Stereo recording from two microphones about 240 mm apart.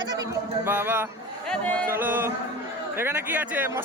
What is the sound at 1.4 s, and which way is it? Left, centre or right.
Speech, centre.